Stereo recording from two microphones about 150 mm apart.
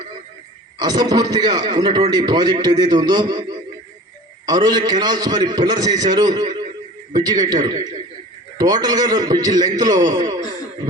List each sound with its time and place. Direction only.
0.8 s a man's voice: 30° right (ahead or behind)
4.4 s a man's voice: 25° right (ahead or behind)